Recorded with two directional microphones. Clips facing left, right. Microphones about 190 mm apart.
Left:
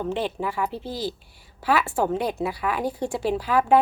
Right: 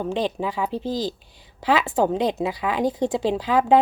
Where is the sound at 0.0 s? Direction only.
15° right (ahead or behind).